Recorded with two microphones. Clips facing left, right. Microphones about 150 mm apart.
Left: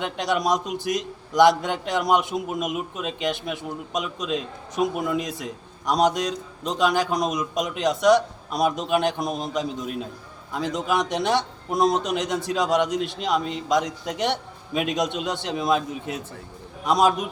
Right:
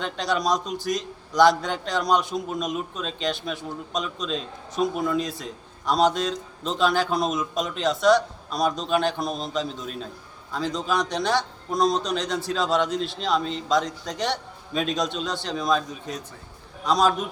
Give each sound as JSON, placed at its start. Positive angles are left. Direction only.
{"t": 0.0, "sound": "a man's voice", "side_deg": 20}
{"t": 2.3, "sound": "a man's voice", "side_deg": 5}
{"t": 2.6, "sound": "a man's voice", "side_deg": 15}